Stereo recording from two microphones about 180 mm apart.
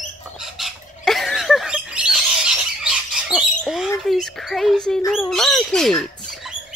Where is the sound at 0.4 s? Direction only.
Centre (ahead or behind).